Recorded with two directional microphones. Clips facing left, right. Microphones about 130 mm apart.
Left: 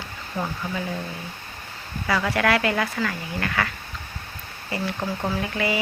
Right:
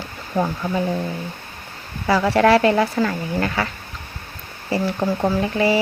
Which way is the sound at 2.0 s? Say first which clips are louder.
Right 7 dB; 35° right (ahead or behind).